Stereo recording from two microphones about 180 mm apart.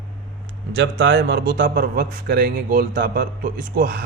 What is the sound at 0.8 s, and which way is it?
Speech, 70° right (ahead or behind).